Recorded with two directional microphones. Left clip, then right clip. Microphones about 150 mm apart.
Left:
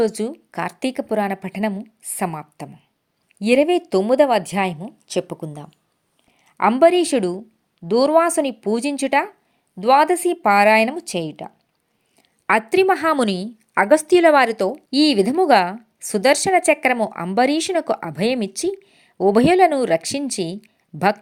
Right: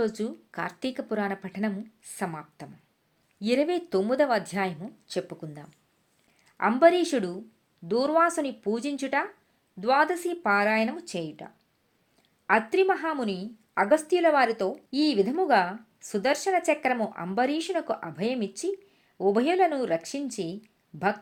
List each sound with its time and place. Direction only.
0.0 s a woman's voice: 50° left (ahead or behind)
13.1 s a woman's voice: 65° left (ahead or behind)
13.7 s a woman's voice: 45° left (ahead or behind)